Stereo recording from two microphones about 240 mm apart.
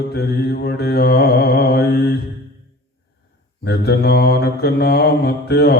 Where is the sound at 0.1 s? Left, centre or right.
Left.